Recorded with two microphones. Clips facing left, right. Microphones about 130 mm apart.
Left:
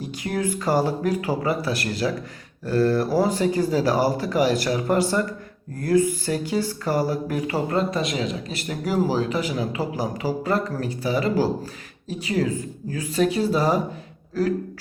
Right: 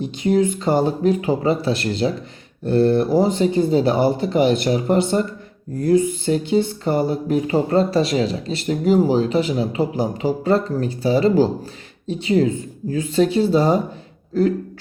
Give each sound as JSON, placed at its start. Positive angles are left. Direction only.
{"t": 0.0, "sound": "speech", "side_deg": -25}